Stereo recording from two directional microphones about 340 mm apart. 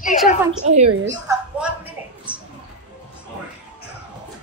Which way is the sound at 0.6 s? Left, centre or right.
Centre.